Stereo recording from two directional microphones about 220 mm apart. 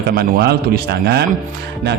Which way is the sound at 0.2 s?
45° right (ahead or behind).